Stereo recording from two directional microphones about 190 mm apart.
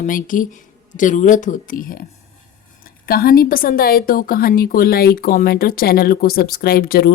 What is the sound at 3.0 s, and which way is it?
A woman's voice, 50° left (ahead or behind).